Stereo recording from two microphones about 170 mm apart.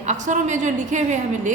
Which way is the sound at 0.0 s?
45° right (ahead or behind).